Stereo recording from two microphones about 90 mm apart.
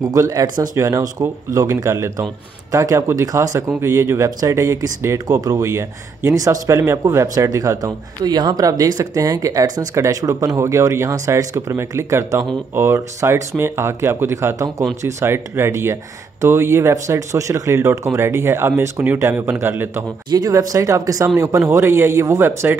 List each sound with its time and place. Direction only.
0.1 s speech: 40° right (ahead or behind); by 20.1 s 25° right (ahead or behind)
20.2 s speech: 45° right (ahead or behind); by 22.8 s 30° right (ahead or behind)